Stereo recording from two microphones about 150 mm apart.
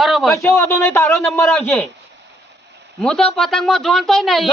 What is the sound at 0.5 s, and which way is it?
A man's voice, 20° left (ahead or behind).